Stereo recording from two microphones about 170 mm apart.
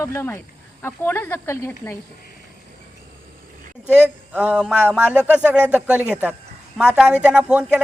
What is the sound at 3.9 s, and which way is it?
A man's voice, 10° right (ahead or behind).